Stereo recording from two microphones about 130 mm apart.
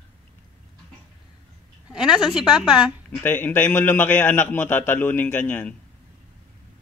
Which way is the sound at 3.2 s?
15° left (ahead or behind).